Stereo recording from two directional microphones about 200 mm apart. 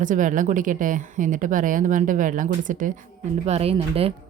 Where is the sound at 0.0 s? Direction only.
40° right (ahead or behind).